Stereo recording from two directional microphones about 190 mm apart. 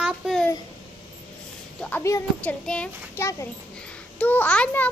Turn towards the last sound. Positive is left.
turn(degrees=10)  # may be behind; listen again after turning